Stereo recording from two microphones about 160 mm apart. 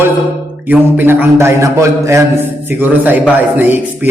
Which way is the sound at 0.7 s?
15° right (ahead or behind).